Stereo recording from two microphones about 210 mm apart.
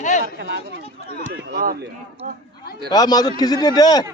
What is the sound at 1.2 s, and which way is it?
Speech, 60° right (ahead or behind).